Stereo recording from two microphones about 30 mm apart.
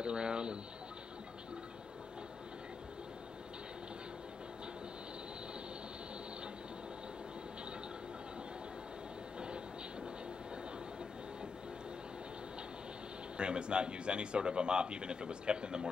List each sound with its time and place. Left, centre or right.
0.0 s speech: right
13.4 s speech: right